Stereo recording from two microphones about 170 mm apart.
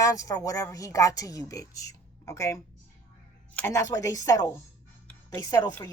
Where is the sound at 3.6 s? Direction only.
15° left (ahead or behind).